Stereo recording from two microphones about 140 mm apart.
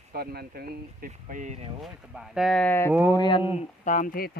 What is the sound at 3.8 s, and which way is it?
Speech, 70° left (ahead or behind).